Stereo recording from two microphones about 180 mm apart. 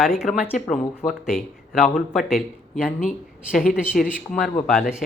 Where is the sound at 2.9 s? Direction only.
50° left (ahead or behind).